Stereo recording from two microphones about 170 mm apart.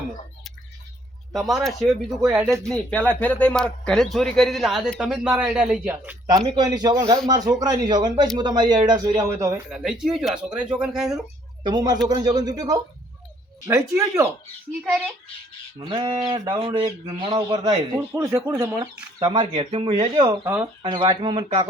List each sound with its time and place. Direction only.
1.3 s a man's voice: centre (ahead or behind)
2.3 s speech: 15° right (ahead or behind)
2.6 s a man's voice: 5° left (ahead or behind)
6.5 s speech: 25° right (ahead or behind)
9.6 s a man's voice: 5° right (ahead or behind)
11.6 s speech: 25° right (ahead or behind)
15.8 s speech: 25° right (ahead or behind)
16.6 s speech: 35° right (ahead or behind)
18.1 s speech: 15° right (ahead or behind)
18.7 s speech: 5° right (ahead or behind)
19.2 s speech: 30° right (ahead or behind)
20.2 s speech: 15° right (ahead or behind)
20.8 s speech: 25° right (ahead or behind)